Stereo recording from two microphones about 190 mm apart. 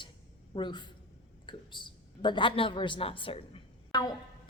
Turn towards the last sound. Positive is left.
turn(degrees=25)  # may be behind; listen again after turning